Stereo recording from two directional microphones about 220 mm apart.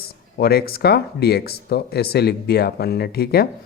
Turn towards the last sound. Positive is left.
turn(degrees=45)  # may be behind; listen again after turning